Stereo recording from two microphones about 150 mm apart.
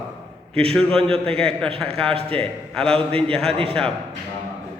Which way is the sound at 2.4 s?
5° left (ahead or behind).